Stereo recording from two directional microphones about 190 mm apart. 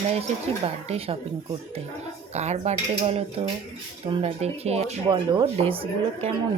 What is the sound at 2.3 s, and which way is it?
Speech, 35° right (ahead or behind).